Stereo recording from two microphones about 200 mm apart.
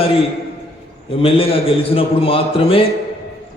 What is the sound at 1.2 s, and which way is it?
A man's voice, 30° left (ahead or behind).